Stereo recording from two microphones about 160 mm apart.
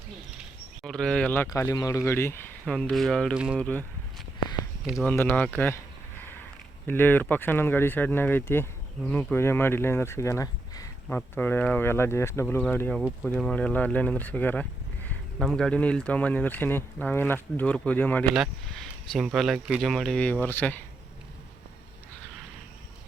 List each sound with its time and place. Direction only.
0.3 s a sound: centre (ahead or behind)
1.5 s speech: 20° left (ahead or behind)
2.6 s speech: 5° left (ahead or behind)
4.9 s speech: 10° left (ahead or behind)
6.8 s speech: 10° left (ahead or behind)
11.3 s speech: 10° left (ahead or behind)